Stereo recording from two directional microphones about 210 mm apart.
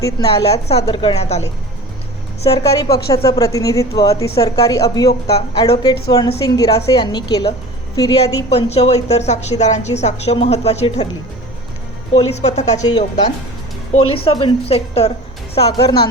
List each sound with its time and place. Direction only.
0.0 s a woman's voice: 15° left (ahead or behind)
0.7 s a woman's voice: 25° left (ahead or behind)
2.6 s a woman's voice: 15° left (ahead or behind)
8.4 s a woman's voice: 30° left (ahead or behind)
12.1 s a woman's voice: 30° left (ahead or behind)
12.8 s a woman's voice: 20° left (ahead or behind)